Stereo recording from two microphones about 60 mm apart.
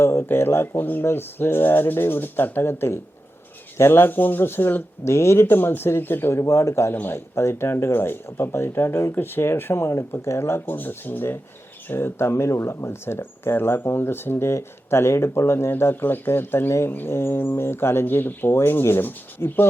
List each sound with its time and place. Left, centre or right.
0.0 s speech: left
6.9 s speech: left
7.3 s speech: left
10.8 s speech: left